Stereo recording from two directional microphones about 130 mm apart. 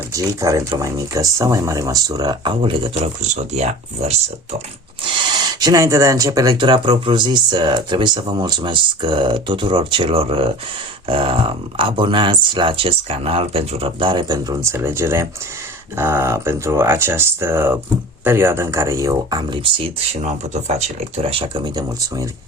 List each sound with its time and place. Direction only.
0.1 s speech: 25° right (ahead or behind); by 3.0 s 40° right (ahead or behind)
3.5 s speech: 55° right (ahead or behind)
5.0 s speech: 35° right (ahead or behind)
19.6 s speech: 45° right (ahead or behind)
20.2 s speech: 60° right (ahead or behind); by 22.3 s 30° right (ahead or behind)